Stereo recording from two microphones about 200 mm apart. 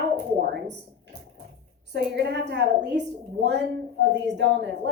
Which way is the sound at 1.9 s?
60° right (ahead or behind).